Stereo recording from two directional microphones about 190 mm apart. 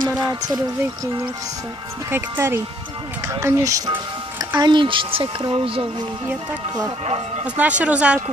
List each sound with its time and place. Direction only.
0.2 s speech: 20° right (ahead or behind)
2.0 s speech: 10° right (ahead or behind)
7.4 s speech: 5° right (ahead or behind)